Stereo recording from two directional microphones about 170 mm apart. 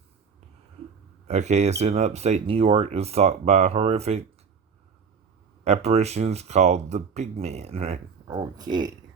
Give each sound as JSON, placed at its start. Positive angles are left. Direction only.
{"t": 1.3, "sound": "speech", "side_deg": -40}
{"t": 5.6, "sound": "speech", "side_deg": -40}
{"t": 8.3, "sound": "speech", "side_deg": -25}